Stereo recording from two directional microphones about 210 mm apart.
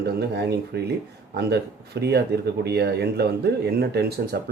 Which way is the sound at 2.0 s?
50° right (ahead or behind).